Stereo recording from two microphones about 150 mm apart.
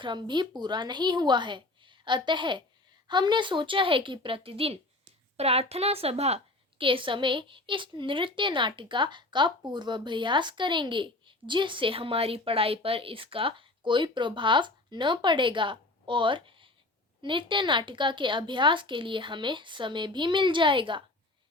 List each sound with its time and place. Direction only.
0.0 s a woman's voice: 30° right (ahead or behind)